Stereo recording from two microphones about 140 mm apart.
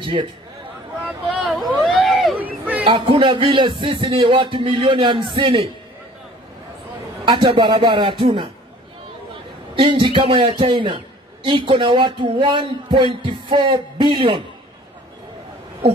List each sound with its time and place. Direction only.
0.0 s a man's voice: 35° right (ahead or behind)
1.4 s vehicle: centre (ahead or behind)
2.3 s a sound: 10° right (ahead or behind)
2.8 s speech: 40° right (ahead or behind)
7.2 s speech: 35° right (ahead or behind)
9.8 s speech: 35° right (ahead or behind)